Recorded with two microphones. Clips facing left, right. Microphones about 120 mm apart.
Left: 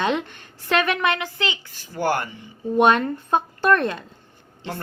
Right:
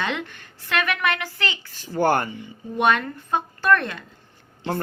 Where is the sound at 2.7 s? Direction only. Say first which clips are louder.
Left 4 dB; 30° left (ahead or behind).